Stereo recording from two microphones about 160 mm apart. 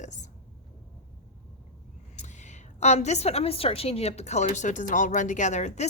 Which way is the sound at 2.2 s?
50° left (ahead or behind).